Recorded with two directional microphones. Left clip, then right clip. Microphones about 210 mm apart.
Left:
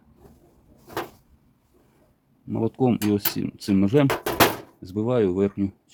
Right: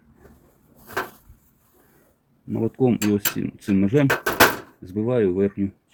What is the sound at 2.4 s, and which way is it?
Speech, 15° left (ahead or behind).